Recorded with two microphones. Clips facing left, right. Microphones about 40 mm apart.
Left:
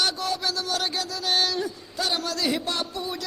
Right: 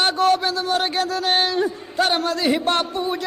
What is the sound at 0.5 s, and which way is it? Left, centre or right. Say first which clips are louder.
A man's voice: right 7 dB; right.